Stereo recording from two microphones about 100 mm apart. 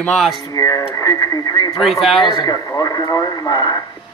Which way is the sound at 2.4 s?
40° left (ahead or behind).